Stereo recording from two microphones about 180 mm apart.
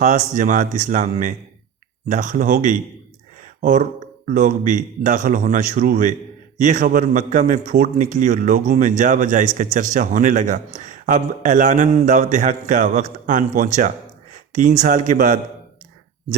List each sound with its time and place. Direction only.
0.0 s a man's voice: 45° right (ahead or behind)
3.4 s a sound: 45° right (ahead or behind)
4.3 s a man's voice: 45° right (ahead or behind)